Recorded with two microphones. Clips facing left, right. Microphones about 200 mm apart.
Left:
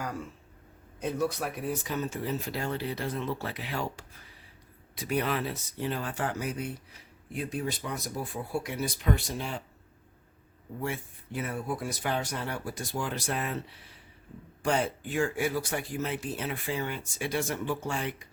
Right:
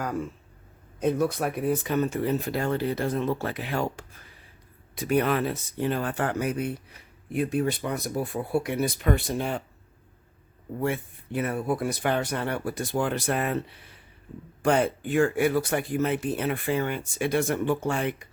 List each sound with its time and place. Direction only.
1.0 s speech: 55° right (ahead or behind)
10.8 s speech: 60° right (ahead or behind)